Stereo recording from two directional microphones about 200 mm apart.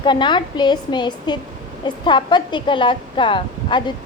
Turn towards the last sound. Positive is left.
turn(degrees=25)  # may be behind; listen again after turning